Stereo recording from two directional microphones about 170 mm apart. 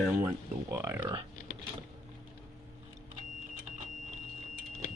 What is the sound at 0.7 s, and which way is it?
Speech, 15° right (ahead or behind).